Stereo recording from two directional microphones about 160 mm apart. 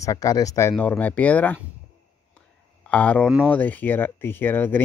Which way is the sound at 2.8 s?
10° left (ahead or behind).